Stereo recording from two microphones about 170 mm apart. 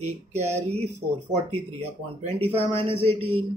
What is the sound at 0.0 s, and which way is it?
Speech, 40° right (ahead or behind).